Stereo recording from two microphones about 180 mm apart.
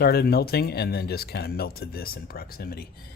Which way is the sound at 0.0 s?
60° left (ahead or behind).